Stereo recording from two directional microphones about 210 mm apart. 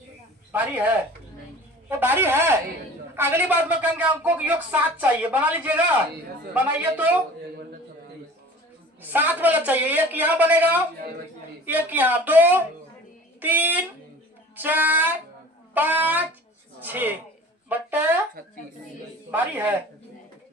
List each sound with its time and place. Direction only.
0.5 s speech: 10° right (ahead or behind)
1.9 s speech: 10° right (ahead or behind)
9.0 s speech: 10° right (ahead or behind)
19.3 s speech: 10° right (ahead or behind)